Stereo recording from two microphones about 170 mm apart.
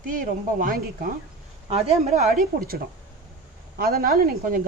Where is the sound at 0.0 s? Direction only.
50° right (ahead or behind).